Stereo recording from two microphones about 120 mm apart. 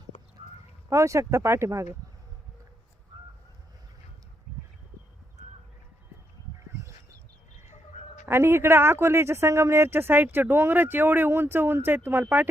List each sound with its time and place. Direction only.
0.9 s speech: 25° right (ahead or behind)
3.1 s honk: 45° right (ahead or behind)
6.7 s a sound: 25° right (ahead or behind)
7.7 s duck: 80° left
8.3 s speech: 20° right (ahead or behind)